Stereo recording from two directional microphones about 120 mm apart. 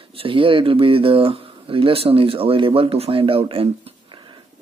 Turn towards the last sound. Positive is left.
turn(degrees=-40)  # may be behind; listen again after turning